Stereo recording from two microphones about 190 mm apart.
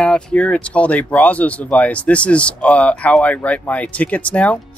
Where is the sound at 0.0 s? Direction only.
5° left (ahead or behind).